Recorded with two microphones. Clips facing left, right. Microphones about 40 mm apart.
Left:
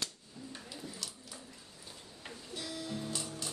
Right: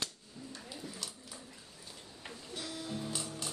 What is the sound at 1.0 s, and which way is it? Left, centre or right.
Dog, centre.